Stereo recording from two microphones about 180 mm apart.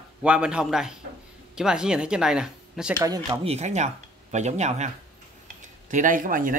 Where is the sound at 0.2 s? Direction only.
5° right (ahead or behind).